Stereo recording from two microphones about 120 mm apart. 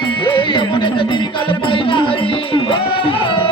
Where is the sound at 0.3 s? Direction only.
45° left (ahead or behind).